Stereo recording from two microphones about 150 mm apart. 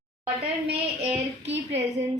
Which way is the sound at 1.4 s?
45° right (ahead or behind).